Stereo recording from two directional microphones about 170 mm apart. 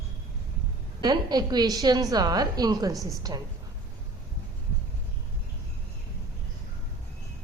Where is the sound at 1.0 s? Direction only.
25° right (ahead or behind).